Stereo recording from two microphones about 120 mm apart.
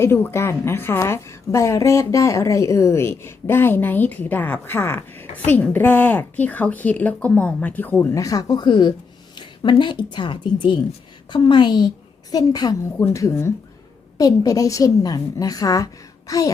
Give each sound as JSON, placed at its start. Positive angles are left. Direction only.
{"t": 0.0, "sound": "a woman's voice", "side_deg": 20}
{"t": 8.1, "sound": "a woman's voice", "side_deg": 30}